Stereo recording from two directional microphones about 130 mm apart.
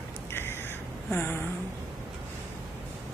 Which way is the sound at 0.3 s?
15° left (ahead or behind).